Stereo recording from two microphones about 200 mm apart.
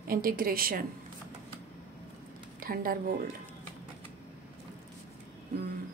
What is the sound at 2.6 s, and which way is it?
Speech, 50° right (ahead or behind).